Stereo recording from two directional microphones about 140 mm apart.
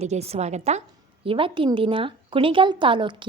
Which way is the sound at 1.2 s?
40° right (ahead or behind).